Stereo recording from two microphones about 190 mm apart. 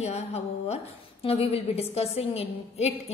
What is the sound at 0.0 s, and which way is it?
A woman's voice, 35° left (ahead or behind).